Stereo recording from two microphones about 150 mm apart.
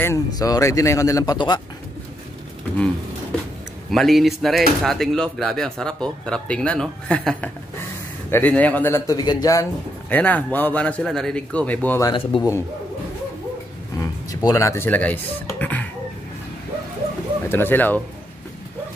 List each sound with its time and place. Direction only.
0.0 s speech: 20° left (ahead or behind)
3.9 s a man's voice: centre (ahead or behind); by 9.7 s 25° left (ahead or behind)
10.0 s a man's voice: 10° left (ahead or behind)
12.2 s a man's voice: 35° left (ahead or behind)
14.3 s a man's voice: 20° left (ahead or behind)
17.5 s a man's voice: 15° left (ahead or behind)